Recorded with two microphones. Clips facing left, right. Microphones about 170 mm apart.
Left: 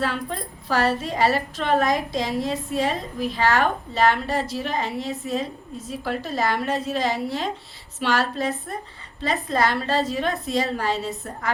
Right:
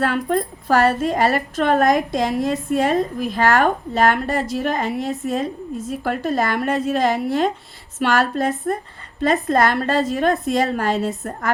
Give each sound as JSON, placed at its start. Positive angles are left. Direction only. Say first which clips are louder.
{"t": 0.0, "sound": "a woman's voice", "louder": "right 7 dB", "side_deg": -50}